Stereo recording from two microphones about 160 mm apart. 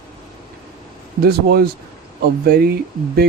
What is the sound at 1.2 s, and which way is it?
Speech, 75° right (ahead or behind).